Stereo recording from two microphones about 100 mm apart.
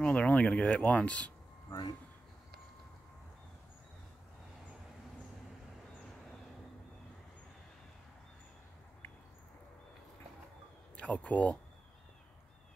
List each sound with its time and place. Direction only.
0.0 s speech: 10° left (ahead or behind)
1.7 s speech: 45° left (ahead or behind)
11.0 s speech: 15° left (ahead or behind)